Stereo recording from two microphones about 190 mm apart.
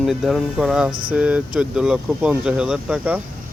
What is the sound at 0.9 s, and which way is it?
Speech, 25° right (ahead or behind).